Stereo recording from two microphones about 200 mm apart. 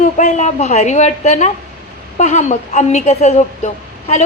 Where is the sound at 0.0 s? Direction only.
35° left (ahead or behind).